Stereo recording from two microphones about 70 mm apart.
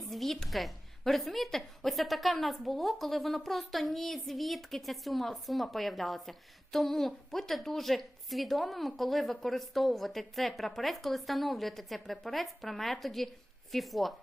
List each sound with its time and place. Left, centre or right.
0.1 s a woman's voice: centre